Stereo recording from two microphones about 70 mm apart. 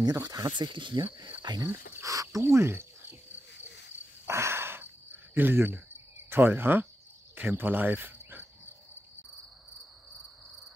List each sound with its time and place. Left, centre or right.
0.0 s speech: right
1.4 s speech: right
2.0 s speech: right
2.4 s cricket: right
4.3 s cricket: right
6.3 s speech: right
7.3 s cricket: right